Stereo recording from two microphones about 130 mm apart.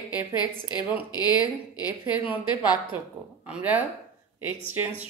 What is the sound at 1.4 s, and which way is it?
Speech, 10° right (ahead or behind).